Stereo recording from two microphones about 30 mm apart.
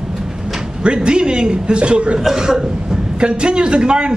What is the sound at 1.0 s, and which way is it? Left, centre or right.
A man's voice, right.